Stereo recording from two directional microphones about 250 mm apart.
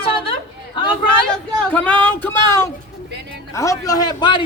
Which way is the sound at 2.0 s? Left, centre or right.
Centre.